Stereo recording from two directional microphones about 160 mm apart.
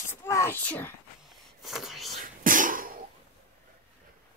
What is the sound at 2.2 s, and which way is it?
Cough, 60° right (ahead or behind).